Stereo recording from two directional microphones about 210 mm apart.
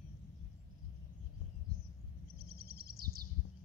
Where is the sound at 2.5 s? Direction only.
50° right (ahead or behind).